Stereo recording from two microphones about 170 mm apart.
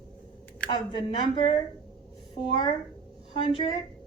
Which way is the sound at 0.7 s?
30° left (ahead or behind).